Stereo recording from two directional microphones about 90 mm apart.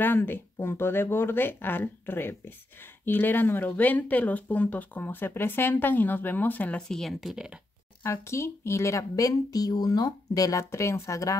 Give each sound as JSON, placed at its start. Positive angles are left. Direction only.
{"t": 0.0, "sound": "speech", "side_deg": 20}
{"t": 6.9, "sound": "speech", "side_deg": 0}
{"t": 8.0, "sound": "speech", "side_deg": 30}